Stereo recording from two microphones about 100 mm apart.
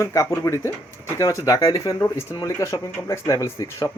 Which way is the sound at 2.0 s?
25° left (ahead or behind).